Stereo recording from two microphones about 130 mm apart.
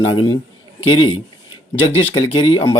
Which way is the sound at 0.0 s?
35° left (ahead or behind).